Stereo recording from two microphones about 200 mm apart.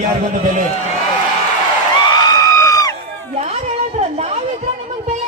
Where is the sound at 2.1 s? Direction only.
20° left (ahead or behind).